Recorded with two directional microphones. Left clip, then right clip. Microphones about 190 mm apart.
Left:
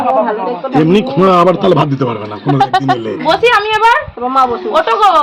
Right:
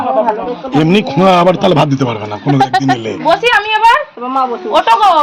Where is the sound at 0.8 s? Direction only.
50° right (ahead or behind).